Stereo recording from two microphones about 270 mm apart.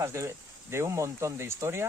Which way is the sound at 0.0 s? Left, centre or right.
Centre.